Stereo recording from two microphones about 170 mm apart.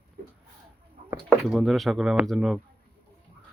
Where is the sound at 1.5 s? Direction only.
Centre (ahead or behind).